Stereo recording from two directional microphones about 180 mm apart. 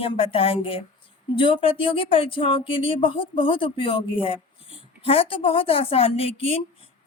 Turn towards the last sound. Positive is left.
turn(degrees=30)  # may be behind; listen again after turning